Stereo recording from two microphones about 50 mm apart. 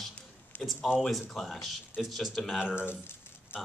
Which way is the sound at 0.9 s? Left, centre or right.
Centre.